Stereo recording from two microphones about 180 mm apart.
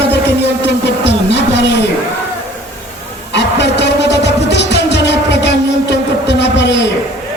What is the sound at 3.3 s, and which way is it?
Music, 75° left (ahead or behind).